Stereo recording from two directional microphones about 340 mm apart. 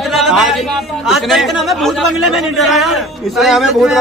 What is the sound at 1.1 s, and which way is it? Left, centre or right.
A man's voice, centre.